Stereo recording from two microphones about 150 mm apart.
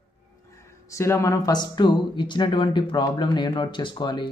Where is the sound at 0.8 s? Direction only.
20° left (ahead or behind).